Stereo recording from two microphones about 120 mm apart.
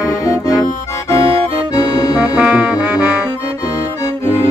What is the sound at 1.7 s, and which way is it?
Accordion, 30° left (ahead or behind).